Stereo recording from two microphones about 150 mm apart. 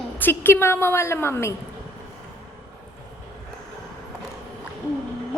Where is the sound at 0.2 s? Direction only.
15° left (ahead or behind).